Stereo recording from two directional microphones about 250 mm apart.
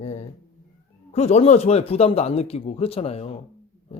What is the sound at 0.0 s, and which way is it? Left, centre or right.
Cat, left.